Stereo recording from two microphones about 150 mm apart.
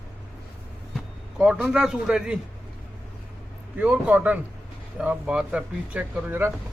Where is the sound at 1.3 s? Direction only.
5° right (ahead or behind).